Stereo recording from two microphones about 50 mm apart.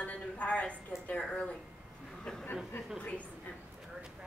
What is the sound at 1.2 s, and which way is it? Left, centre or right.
A woman's voice, centre.